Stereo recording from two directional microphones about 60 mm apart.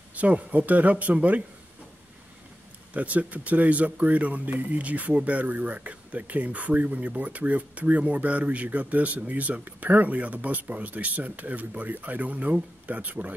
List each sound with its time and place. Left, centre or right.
0.1 s speech: right
2.9 s speech: right